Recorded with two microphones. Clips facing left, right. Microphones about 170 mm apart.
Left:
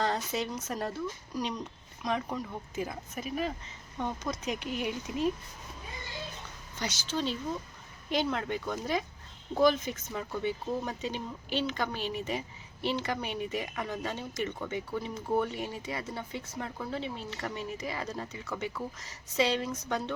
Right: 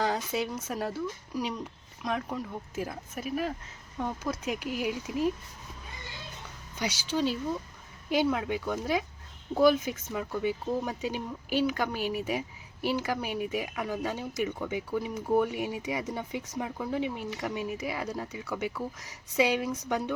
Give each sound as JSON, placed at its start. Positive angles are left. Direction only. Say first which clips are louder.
{"t": 0.0, "sound": "speech", "louder": "right 2 dB", "side_deg": -10}
{"t": 6.7, "sound": "speech", "louder": "right 4 dB", "side_deg": -10}